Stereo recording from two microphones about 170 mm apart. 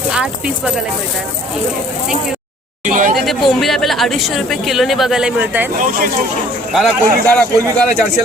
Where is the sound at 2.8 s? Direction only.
50° right (ahead or behind).